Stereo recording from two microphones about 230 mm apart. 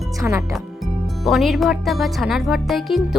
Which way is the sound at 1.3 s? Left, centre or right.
Centre.